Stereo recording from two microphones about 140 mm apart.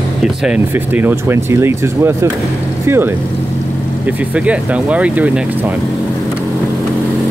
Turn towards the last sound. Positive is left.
turn(degrees=-10)  # may be behind; listen again after turning